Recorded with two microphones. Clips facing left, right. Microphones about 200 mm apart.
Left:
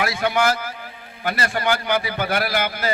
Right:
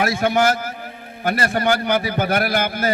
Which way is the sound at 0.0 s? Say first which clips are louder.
Right 3 dB; 45° right (ahead or behind).